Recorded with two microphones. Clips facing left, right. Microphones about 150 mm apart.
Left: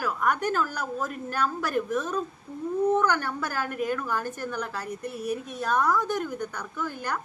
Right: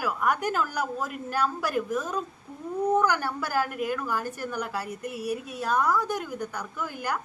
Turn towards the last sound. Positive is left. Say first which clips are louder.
# even
turn(degrees=-10)  # may be behind; listen again after turning